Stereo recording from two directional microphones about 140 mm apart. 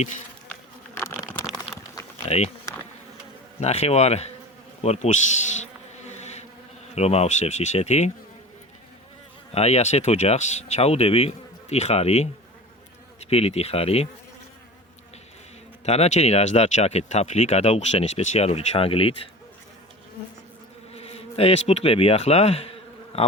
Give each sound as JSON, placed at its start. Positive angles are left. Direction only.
{"t": 0.9, "sound": "a sound", "side_deg": 20}
{"t": 3.6, "sound": "speech", "side_deg": 50}
{"t": 6.1, "sound": "bee", "side_deg": 55}
{"t": 6.9, "sound": "speech", "side_deg": 50}
{"t": 9.5, "sound": "speech", "side_deg": 50}
{"t": 15.9, "sound": "speech", "side_deg": 55}
{"t": 20.9, "sound": "insect", "side_deg": 45}